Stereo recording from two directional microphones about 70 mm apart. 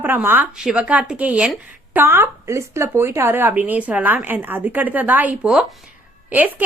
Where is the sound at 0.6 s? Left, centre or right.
Centre; by 3.5 s right.